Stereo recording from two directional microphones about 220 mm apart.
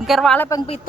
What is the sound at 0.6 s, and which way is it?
Speech, 25° left (ahead or behind).